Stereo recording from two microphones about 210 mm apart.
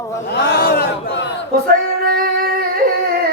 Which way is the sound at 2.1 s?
45° right (ahead or behind).